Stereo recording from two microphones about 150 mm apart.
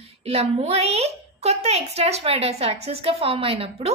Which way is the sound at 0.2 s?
40° right (ahead or behind).